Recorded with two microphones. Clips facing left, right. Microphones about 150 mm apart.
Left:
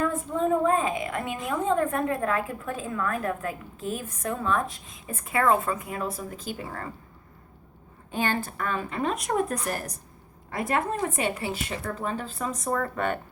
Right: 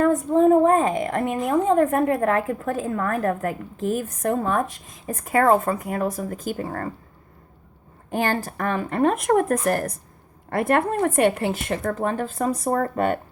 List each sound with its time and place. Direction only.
0.1 s a woman's voice: 40° right (ahead or behind)
8.2 s a woman's voice: 40° right (ahead or behind)